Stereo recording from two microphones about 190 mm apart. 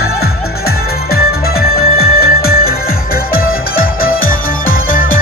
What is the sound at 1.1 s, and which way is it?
Music, 55° left (ahead or behind).